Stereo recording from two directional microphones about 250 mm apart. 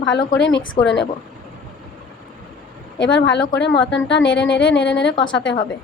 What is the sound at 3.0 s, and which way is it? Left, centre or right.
A woman's voice, left.